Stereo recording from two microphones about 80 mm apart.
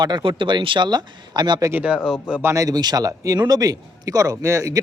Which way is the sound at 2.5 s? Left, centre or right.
Right.